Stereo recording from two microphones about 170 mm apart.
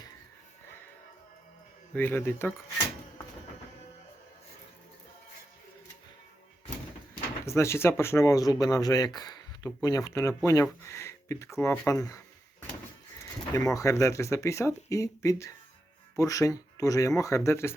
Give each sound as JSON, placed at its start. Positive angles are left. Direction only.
{"t": 1.9, "sound": "speech", "side_deg": 10}
{"t": 7.4, "sound": "speech", "side_deg": 15}
{"t": 13.2, "sound": "a sound", "side_deg": 20}
{"t": 13.7, "sound": "speech", "side_deg": 20}